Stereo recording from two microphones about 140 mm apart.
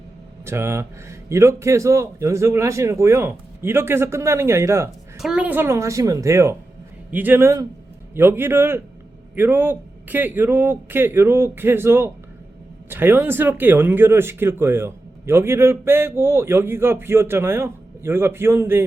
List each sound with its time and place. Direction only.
0.4 s speech: 20° right (ahead or behind)
5.1 s speech: 5° right (ahead or behind)